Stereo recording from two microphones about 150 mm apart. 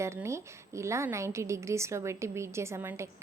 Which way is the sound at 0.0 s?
20° right (ahead or behind).